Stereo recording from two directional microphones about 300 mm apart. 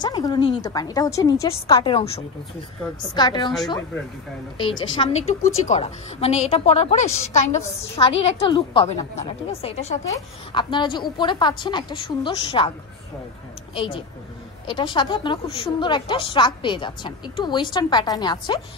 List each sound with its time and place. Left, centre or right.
0.0 s a woman's voice: centre
4.6 s a woman's voice: centre
13.7 s a woman's voice: centre